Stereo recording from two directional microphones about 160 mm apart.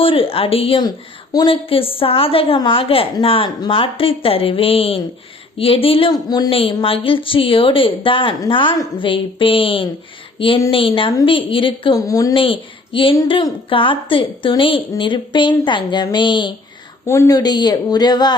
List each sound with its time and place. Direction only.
0.0 s a woman's voice: 35° left (ahead or behind)
11.9 s speech: 20° left (ahead or behind)
12.4 s a woman's voice: 35° left (ahead or behind)
17.1 s speech: 20° left (ahead or behind)